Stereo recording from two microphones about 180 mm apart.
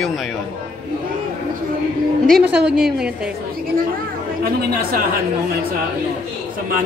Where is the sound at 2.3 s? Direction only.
5° right (ahead or behind).